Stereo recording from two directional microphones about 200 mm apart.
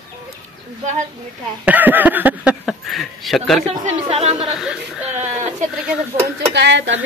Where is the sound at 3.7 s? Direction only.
30° right (ahead or behind).